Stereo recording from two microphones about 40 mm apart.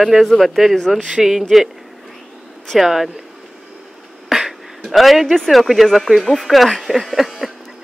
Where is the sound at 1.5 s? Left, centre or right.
Centre.